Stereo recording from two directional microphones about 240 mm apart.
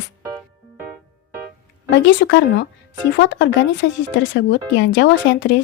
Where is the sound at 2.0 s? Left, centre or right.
Left.